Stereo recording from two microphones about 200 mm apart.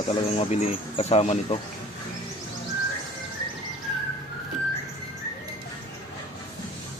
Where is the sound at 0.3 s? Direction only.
35° left (ahead or behind).